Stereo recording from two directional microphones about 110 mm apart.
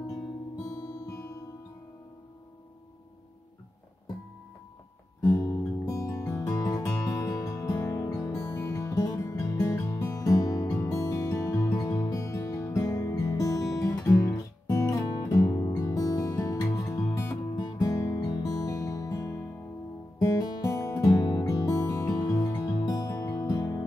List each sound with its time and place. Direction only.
0.0 s music: 30° left (ahead or behind)
5.2 s music: 35° left (ahead or behind)
8.5 s music: 25° left (ahead or behind)
22.7 s music: 35° left (ahead or behind)